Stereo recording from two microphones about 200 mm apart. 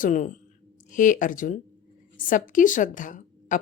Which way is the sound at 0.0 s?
40° left (ahead or behind).